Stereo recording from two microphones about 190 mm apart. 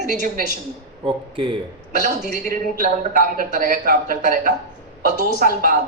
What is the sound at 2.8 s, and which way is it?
A woman's voice, 50° right (ahead or behind).